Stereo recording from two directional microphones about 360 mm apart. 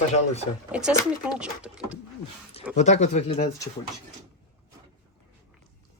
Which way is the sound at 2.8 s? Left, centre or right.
Centre.